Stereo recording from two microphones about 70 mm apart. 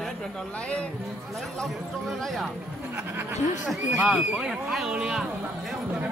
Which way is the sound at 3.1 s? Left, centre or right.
Right.